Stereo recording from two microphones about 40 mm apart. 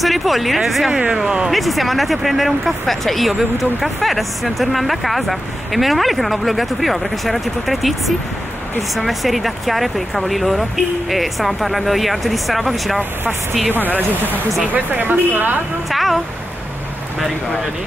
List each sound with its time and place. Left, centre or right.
0.0 s speech: centre
8.9 s speech: centre
13.7 s speech: right
15.9 s speech: centre